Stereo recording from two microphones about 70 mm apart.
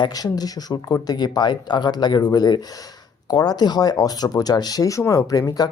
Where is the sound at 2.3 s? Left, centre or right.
Left.